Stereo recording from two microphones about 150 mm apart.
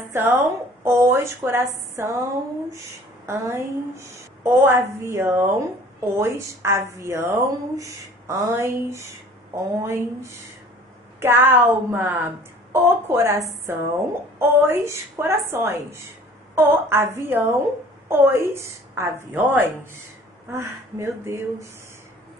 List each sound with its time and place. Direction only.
0.1 s a woman's voice: 15° right (ahead or behind)
3.3 s a woman's voice: 20° right (ahead or behind)